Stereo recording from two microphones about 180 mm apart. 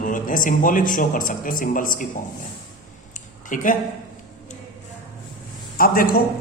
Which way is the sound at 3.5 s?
45° left (ahead or behind).